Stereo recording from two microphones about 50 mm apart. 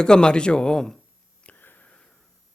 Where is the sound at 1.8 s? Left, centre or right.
Centre.